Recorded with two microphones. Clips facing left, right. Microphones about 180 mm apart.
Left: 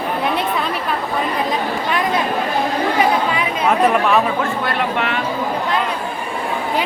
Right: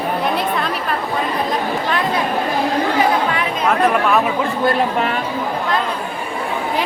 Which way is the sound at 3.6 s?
5° left (ahead or behind).